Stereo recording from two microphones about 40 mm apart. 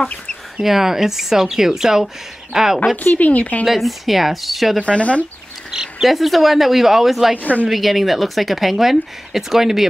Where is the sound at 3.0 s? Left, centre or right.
Left.